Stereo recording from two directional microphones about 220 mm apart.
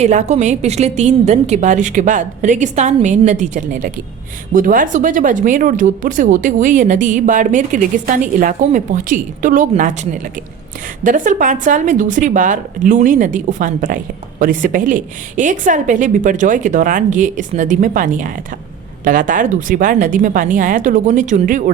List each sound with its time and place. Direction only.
0.0 s a woman's voice: 30° right (ahead or behind)